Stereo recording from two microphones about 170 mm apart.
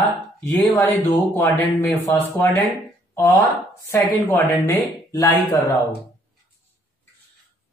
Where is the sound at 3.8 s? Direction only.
15° left (ahead or behind).